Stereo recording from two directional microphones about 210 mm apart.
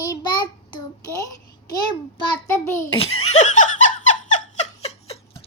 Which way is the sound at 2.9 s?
30° left (ahead or behind).